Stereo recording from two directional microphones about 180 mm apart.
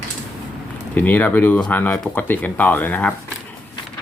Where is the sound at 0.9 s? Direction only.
10° left (ahead or behind).